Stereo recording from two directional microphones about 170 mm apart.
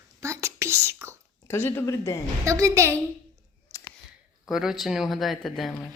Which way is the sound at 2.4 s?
20° right (ahead or behind).